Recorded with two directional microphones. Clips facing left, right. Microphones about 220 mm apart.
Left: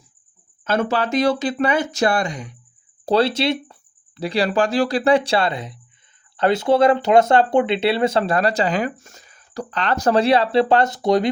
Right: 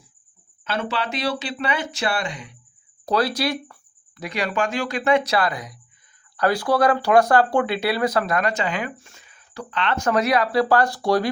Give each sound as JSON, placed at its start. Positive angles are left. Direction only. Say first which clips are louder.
{"t": 0.6, "sound": "speech", "louder": "left 6 dB", "side_deg": 45}
{"t": 3.1, "sound": "speech", "louder": "left 4 dB", "side_deg": 25}